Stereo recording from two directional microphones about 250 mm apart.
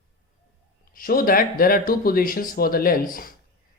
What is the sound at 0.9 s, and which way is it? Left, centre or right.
Speech, left.